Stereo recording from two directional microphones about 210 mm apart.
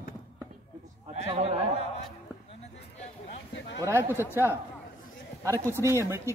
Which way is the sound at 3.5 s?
60° left (ahead or behind).